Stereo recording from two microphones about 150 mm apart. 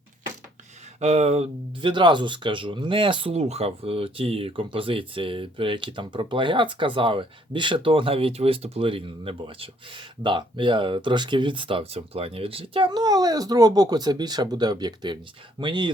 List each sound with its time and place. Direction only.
0.9 s speech: 45° right (ahead or behind)
1.8 s speech: 30° right (ahead or behind)